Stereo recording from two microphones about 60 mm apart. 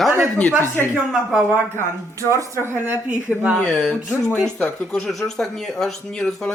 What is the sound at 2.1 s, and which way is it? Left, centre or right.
Speech, right.